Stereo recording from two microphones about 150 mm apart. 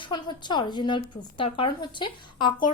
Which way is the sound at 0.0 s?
30° left (ahead or behind).